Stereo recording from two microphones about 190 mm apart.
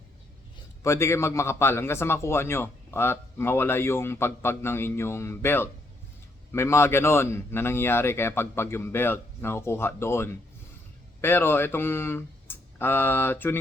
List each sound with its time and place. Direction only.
0.8 s a man's voice: 15° left (ahead or behind)